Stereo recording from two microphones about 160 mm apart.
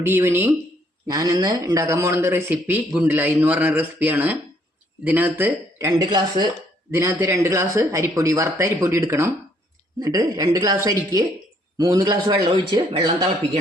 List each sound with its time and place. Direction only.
0.0 s a man's voice: 15° right (ahead or behind)
6.0 s a man's voice: 25° right (ahead or behind)
6.9 s a man's voice: 15° right (ahead or behind)